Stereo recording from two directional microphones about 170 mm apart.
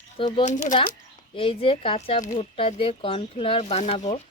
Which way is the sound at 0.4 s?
45° left (ahead or behind).